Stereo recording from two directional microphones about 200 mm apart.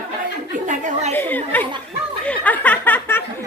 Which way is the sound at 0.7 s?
35° right (ahead or behind).